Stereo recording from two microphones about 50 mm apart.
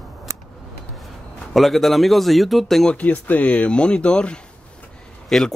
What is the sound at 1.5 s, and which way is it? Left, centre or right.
Speech, centre.